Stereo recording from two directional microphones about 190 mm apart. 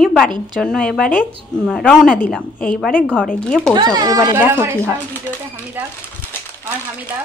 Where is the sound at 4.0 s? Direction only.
20° right (ahead or behind).